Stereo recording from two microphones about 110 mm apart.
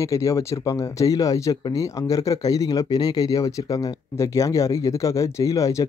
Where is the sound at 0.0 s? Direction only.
30° left (ahead or behind).